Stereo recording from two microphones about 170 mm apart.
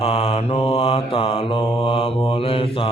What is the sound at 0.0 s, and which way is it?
Mantra, 35° left (ahead or behind).